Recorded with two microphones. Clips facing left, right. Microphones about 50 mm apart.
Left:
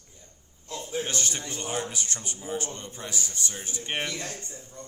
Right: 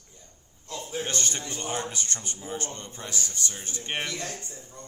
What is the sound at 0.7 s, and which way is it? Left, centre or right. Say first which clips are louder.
A man's voice: even; centre.